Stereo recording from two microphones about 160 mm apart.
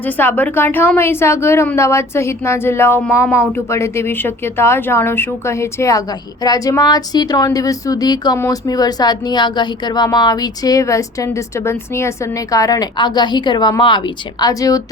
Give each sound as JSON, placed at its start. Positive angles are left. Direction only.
{"t": 0.0, "sound": "a woman's voice", "side_deg": 10}